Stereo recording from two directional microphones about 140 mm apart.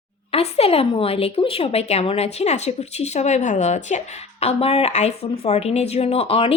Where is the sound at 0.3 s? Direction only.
45° left (ahead or behind).